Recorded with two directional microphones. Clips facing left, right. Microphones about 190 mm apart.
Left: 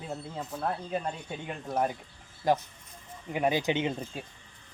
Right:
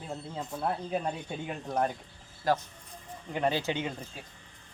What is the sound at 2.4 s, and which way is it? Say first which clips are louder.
Speech: left 2 dB; 20° left (ahead or behind).